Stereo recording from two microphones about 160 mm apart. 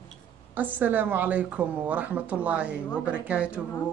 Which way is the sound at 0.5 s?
10° right (ahead or behind).